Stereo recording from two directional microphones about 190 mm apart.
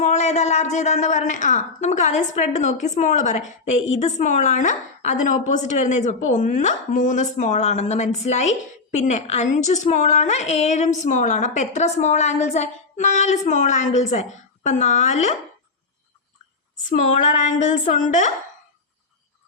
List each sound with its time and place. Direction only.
0.0 s a woman's voice: 35° left (ahead or behind)
16.9 s a woman's voice: 40° left (ahead or behind)